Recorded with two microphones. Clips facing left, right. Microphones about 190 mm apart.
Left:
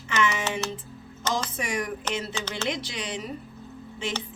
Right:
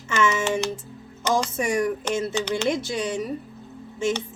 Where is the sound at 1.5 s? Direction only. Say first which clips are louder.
Right 7 dB; 45° right (ahead or behind).